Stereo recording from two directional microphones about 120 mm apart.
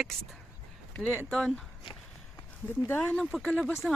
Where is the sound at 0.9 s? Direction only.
15° left (ahead or behind).